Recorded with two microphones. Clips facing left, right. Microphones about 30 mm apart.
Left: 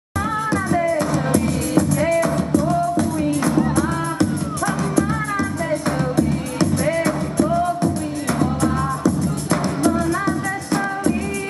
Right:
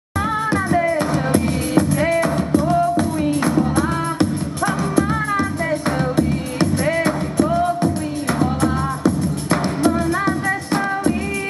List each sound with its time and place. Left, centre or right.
0.2 s music: right